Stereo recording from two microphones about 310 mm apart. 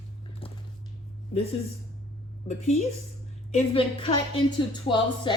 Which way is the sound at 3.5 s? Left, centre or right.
Centre.